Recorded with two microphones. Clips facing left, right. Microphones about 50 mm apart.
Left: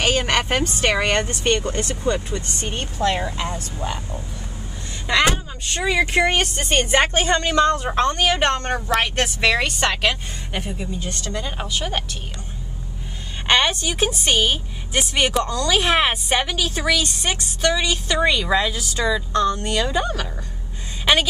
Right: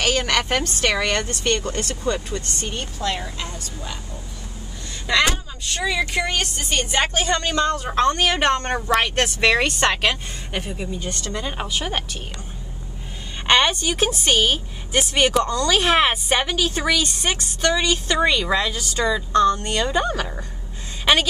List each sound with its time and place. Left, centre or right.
0.0 s speech: left
2.7 s speech: left
5.2 s speech: left
7.9 s a woman's voice: centre
13.5 s a woman's voice: centre
13.8 s a woman's voice: centre
17.7 s a woman's voice: centre
21.0 s a sound: centre